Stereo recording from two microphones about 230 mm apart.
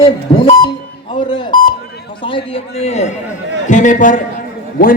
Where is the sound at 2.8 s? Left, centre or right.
Left.